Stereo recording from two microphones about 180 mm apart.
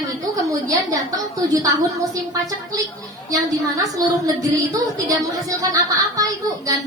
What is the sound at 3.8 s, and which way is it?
Music, 20° right (ahead or behind).